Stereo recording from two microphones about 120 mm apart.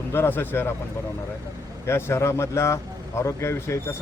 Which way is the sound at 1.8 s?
20° left (ahead or behind).